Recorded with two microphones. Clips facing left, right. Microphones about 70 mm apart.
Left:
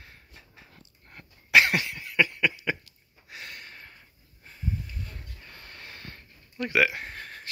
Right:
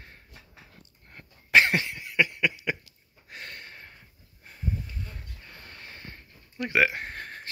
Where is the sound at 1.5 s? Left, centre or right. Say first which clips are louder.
Even; right.